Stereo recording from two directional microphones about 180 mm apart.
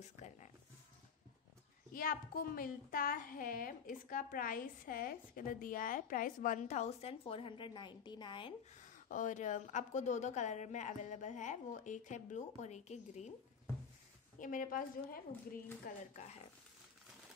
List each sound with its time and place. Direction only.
0.0 s a sound: 40° left (ahead or behind)
2.0 s a woman's voice: 50° left (ahead or behind); by 8.5 s 25° left (ahead or behind)
8.7 s a woman's voice: 45° left (ahead or behind)
14.4 s a woman's voice: 50° left (ahead or behind)
16.1 s a woman's voice: 40° left (ahead or behind)